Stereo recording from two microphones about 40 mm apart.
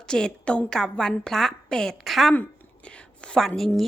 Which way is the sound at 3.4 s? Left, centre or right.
Centre.